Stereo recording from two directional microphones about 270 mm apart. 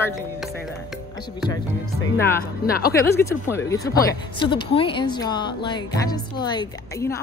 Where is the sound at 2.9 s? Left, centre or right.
Centre.